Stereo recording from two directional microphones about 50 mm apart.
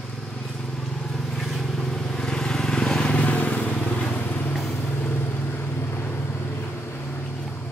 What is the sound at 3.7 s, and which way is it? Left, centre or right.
Vehicle, centre.